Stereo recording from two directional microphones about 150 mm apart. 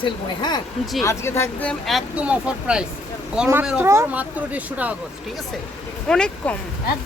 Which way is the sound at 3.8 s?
15° right (ahead or behind).